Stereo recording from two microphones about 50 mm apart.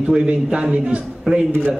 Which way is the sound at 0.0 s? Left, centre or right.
Centre.